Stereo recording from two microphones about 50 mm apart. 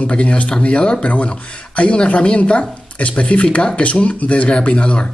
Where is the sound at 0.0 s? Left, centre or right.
Left.